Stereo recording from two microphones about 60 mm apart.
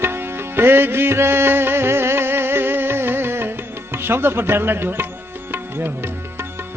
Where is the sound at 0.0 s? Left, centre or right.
Right.